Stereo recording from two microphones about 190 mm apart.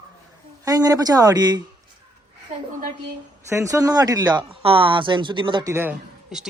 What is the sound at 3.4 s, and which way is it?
Speech, 15° right (ahead or behind).